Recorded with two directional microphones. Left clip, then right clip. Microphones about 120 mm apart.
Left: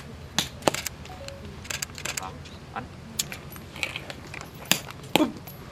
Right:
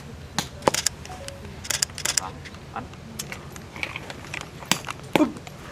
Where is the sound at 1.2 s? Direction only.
25° right (ahead or behind).